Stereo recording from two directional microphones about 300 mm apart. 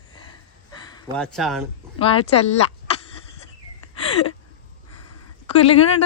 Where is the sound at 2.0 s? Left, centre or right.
Centre.